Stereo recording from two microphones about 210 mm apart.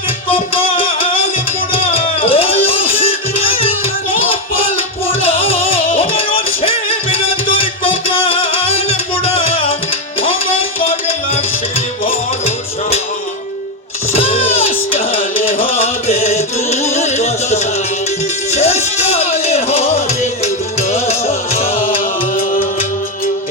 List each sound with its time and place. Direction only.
0.3 s music: 25° left (ahead or behind)
10.8 s music: 30° left (ahead or behind)
14.1 s vehicle: 30° left (ahead or behind)
14.7 s music: 35° left (ahead or behind)